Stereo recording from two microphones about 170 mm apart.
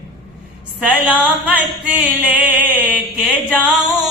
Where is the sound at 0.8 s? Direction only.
10° right (ahead or behind).